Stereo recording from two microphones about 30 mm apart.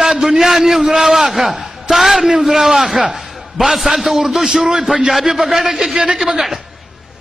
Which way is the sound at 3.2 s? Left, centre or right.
Centre.